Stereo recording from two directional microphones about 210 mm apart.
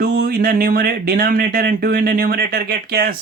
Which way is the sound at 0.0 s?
45° right (ahead or behind).